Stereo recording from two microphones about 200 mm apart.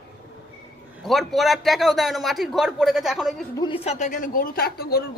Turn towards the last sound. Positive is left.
turn(degrees=50)  # may be behind; listen again after turning